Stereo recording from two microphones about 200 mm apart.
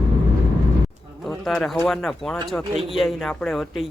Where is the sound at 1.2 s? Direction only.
Centre (ahead or behind).